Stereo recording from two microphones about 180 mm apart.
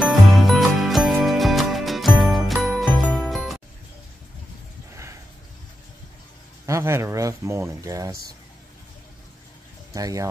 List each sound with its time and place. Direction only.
0.0 s music: centre (ahead or behind)
6.6 s speech: 15° right (ahead or behind)
9.9 s speech: 20° right (ahead or behind)